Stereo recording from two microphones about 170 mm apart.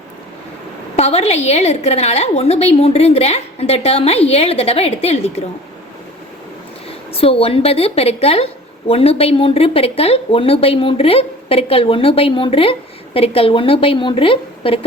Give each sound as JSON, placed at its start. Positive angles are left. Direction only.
{"t": 0.9, "sound": "a woman's voice", "side_deg": 40}
{"t": 7.1, "sound": "a woman's voice", "side_deg": 35}